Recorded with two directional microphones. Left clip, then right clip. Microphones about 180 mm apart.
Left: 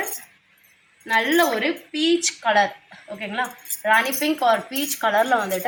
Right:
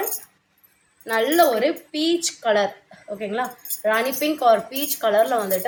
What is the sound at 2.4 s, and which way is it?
A woman's voice, 25° right (ahead or behind).